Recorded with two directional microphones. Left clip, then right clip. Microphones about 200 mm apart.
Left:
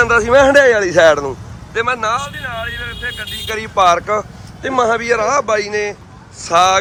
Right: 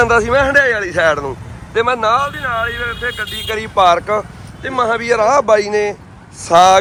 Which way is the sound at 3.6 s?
15° left (ahead or behind).